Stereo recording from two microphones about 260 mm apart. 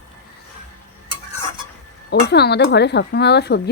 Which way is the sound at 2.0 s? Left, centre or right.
Left.